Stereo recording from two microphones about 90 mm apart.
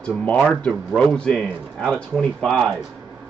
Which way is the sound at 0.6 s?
5° left (ahead or behind).